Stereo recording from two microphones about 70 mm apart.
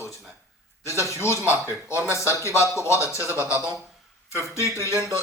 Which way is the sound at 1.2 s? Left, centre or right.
Left.